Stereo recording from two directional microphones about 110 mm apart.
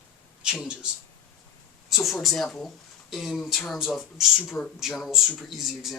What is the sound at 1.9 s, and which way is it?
Speech, centre (ahead or behind).